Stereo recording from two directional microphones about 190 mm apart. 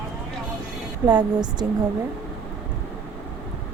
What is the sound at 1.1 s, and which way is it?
Speech, 20° right (ahead or behind).